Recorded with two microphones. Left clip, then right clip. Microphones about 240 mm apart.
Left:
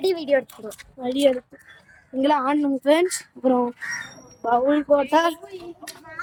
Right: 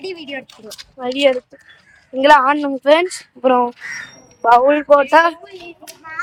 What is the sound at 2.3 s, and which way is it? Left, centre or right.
Speech, centre.